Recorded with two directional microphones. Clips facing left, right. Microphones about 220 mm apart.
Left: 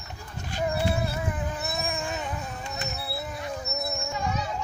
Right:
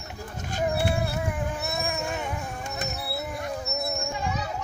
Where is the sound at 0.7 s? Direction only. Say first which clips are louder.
Right 1 dB; 15° right (ahead or behind).